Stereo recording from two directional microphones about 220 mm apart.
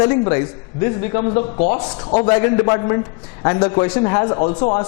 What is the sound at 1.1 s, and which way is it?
A man's voice, 25° left (ahead or behind).